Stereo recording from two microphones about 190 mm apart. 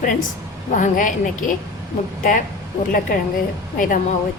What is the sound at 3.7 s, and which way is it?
Speech, 45° left (ahead or behind).